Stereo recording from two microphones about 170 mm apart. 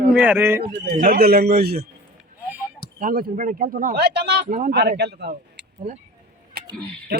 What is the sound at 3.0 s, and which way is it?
A man's voice, 55° right (ahead or behind).